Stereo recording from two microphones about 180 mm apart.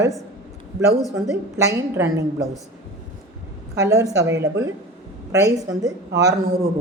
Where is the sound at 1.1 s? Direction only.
15° right (ahead or behind).